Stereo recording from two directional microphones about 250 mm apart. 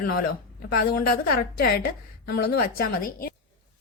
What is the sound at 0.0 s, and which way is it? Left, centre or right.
A woman's voice, left.